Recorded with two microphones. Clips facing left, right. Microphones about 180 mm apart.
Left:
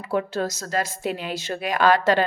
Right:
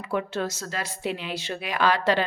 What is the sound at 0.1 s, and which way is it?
A woman's voice, 40° left (ahead or behind).